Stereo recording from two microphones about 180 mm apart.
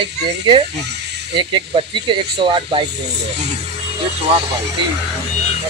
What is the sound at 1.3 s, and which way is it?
Speech, 30° right (ahead or behind).